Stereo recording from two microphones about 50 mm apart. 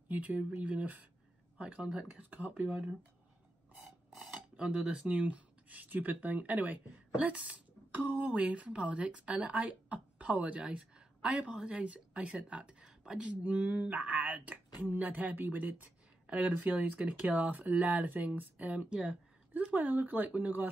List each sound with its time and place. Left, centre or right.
0.1 s speech: right
4.6 s speech: centre
5.0 s speech: right
13.4 s speech: right
18.9 s speech: centre
19.5 s speech: right